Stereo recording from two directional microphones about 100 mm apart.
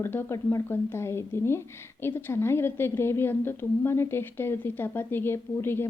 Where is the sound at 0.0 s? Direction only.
25° left (ahead or behind).